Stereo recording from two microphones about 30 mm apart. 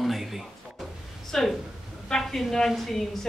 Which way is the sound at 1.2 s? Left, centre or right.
Centre.